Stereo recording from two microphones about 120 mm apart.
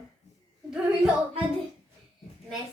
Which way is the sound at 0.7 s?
5° right (ahead or behind).